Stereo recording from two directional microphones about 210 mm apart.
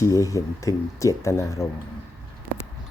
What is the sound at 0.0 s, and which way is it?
Speech, 15° left (ahead or behind).